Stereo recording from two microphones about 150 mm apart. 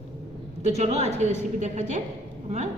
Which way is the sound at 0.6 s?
45° right (ahead or behind).